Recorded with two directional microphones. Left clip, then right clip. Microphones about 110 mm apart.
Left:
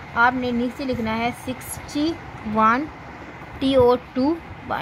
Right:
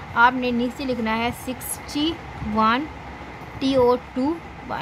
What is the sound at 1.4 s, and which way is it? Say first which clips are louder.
A woman's voice: even; 15° left (ahead or behind).